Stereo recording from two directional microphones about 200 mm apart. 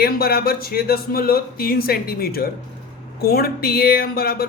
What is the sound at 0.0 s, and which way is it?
Speech, 50° left (ahead or behind).